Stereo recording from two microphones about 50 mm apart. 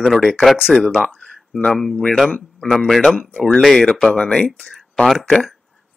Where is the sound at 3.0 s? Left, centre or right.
Centre.